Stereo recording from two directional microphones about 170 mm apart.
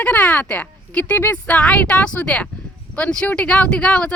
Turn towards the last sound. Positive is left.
turn(degrees=5)  # may be behind; listen again after turning